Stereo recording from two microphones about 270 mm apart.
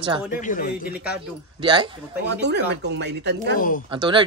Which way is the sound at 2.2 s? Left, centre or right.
Right.